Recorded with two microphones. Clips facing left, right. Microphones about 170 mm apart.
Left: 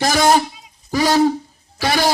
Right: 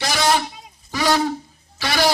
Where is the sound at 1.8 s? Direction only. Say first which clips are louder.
Left 4 dB; 45° left (ahead or behind).